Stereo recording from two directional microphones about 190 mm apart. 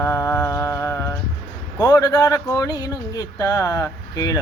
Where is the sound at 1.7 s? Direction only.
20° left (ahead or behind).